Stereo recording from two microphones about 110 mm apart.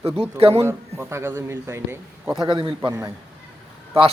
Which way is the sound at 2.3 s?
45° right (ahead or behind).